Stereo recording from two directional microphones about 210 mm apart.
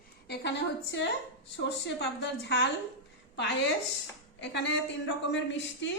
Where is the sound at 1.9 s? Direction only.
55° left (ahead or behind).